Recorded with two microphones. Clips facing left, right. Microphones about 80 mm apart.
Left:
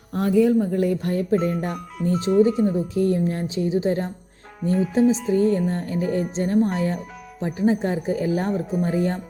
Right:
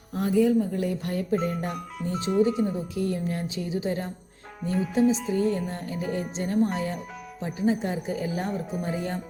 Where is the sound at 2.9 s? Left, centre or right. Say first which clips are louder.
Left 7 dB; left.